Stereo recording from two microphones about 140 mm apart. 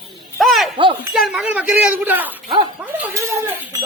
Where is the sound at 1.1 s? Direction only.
5° right (ahead or behind).